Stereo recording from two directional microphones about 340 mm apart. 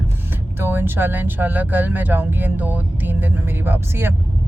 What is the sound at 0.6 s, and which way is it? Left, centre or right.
Speech, centre.